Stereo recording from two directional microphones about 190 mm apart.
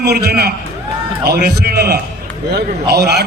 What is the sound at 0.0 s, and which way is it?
A man's voice, 55° right (ahead or behind).